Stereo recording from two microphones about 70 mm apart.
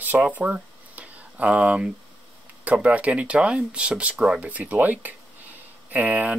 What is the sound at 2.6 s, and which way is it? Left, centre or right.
Speech, right.